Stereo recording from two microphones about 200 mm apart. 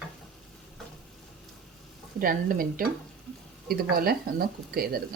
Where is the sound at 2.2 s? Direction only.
45° right (ahead or behind).